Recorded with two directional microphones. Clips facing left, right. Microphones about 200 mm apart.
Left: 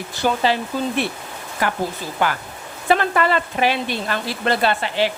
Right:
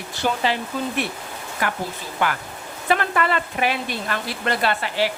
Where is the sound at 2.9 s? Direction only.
30° left (ahead or behind).